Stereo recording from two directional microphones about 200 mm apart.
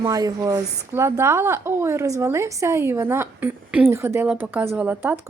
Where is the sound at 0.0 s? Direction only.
15° right (ahead or behind).